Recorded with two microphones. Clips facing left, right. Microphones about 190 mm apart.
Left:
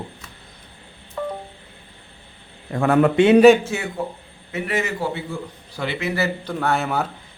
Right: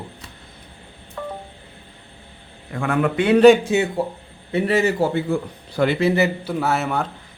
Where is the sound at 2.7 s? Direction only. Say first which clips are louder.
Left 4 dB; 35° left (ahead or behind).